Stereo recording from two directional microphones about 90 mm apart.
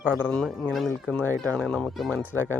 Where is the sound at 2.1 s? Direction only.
20° left (ahead or behind).